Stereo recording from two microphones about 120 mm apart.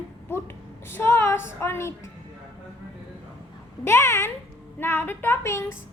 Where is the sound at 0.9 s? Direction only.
20° left (ahead or behind).